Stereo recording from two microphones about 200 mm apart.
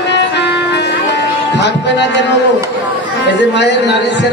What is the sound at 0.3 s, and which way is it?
Music, 60° left (ahead or behind).